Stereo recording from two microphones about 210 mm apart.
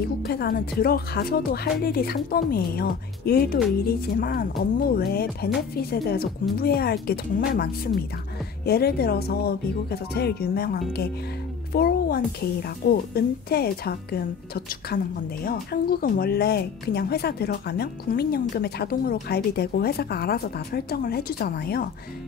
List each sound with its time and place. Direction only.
0.2 s speech: 50° left (ahead or behind)
6.5 s speech: 45° left (ahead or behind)